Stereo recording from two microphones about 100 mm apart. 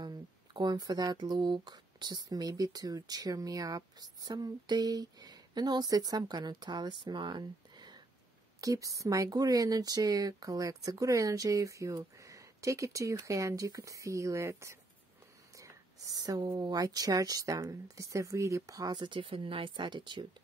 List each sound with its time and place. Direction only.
0.0 s speech: 45° right (ahead or behind)
7.1 s a sound: 50° right (ahead or behind)
8.5 s speech: 35° right (ahead or behind); by 20.2 s 50° right (ahead or behind)